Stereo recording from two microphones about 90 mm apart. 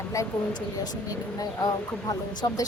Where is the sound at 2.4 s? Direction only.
40° left (ahead or behind).